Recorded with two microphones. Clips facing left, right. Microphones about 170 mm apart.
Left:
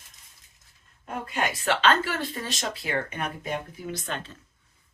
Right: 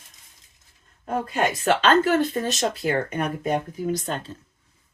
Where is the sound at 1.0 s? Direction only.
40° right (ahead or behind).